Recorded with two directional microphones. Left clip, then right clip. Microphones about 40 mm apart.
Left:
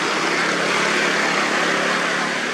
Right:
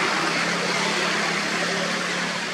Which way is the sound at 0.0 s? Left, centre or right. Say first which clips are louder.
Left 3 dB; centre.